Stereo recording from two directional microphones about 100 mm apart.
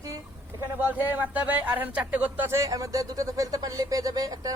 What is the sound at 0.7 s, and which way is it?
A man's voice, 15° right (ahead or behind).